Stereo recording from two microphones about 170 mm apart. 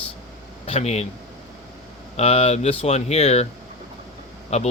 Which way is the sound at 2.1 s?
40° left (ahead or behind).